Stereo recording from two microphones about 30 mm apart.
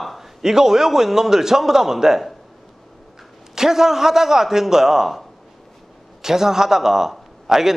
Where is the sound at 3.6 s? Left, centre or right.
Centre.